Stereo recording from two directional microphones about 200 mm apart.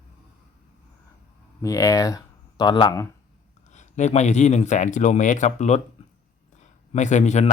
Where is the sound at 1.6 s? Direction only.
15° left (ahead or behind).